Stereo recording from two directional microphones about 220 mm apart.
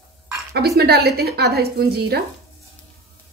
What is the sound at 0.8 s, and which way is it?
A woman's voice, 45° right (ahead or behind).